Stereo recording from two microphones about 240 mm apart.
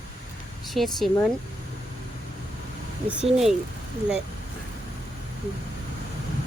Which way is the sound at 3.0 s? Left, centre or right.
Centre.